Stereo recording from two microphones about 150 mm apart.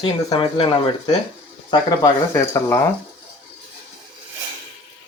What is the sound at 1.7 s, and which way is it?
Speech, 30° left (ahead or behind).